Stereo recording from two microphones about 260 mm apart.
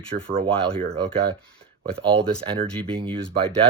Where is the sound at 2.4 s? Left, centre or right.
Centre.